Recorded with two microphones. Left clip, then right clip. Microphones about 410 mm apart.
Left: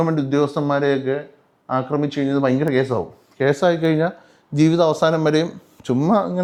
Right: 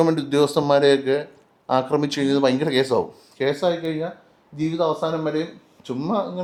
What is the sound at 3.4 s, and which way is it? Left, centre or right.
Speech, left.